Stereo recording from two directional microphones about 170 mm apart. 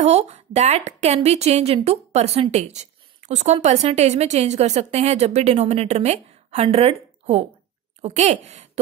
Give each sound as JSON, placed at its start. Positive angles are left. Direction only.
{"t": 0.0, "sound": "a woman's voice", "side_deg": -40}